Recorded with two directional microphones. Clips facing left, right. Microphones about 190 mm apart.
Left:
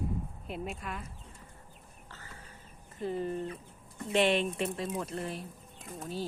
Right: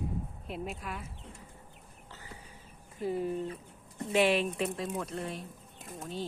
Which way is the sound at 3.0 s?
5° right (ahead or behind).